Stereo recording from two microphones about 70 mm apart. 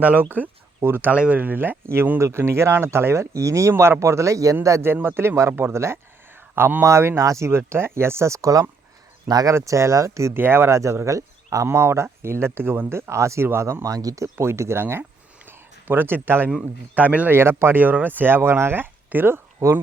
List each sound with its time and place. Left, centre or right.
0.0 s speech: right
1.1 s speech: centre; by 4.9 s right
4.9 s a man's voice: right
6.8 s speech: right
10.3 s speech: right
11.0 s speech: right
14.3 s speech: right
15.4 s a sound: right
16.5 s a man's voice: centre
17.2 s speech: right
19.6 s speech: right